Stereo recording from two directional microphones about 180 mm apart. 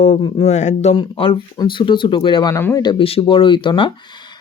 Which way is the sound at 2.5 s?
15° left (ahead or behind).